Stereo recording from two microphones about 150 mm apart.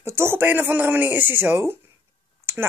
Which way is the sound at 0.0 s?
15° right (ahead or behind).